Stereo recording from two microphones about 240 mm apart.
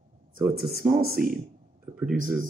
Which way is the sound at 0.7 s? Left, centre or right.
Right.